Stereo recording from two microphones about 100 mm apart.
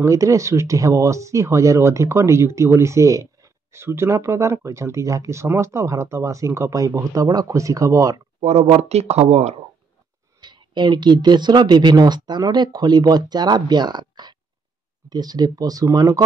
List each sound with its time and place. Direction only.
0.0 s speech: 35° right (ahead or behind)
8.4 s speech: 90° right
10.4 s speech: 50° right (ahead or behind)